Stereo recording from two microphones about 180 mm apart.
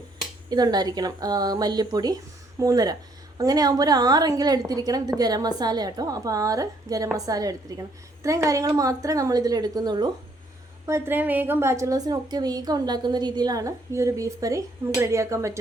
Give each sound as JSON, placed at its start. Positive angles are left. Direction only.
{"t": 0.5, "sound": "a woman's voice", "side_deg": -20}